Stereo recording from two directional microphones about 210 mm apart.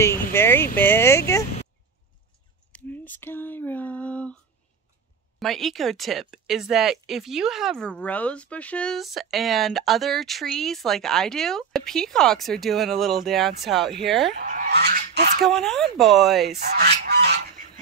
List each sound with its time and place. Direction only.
0.0 s speech: 10° left (ahead or behind)
0.7 s a sound: 10° left (ahead or behind)
2.7 s a sound: 10° left (ahead or behind)
5.4 s speech: centre (ahead or behind)
14.4 s goose: 40° right (ahead or behind)
15.4 s speech: centre (ahead or behind)
16.4 s goose: 50° right (ahead or behind)